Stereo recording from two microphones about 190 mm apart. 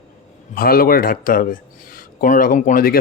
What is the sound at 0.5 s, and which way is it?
Speech, 50° left (ahead or behind).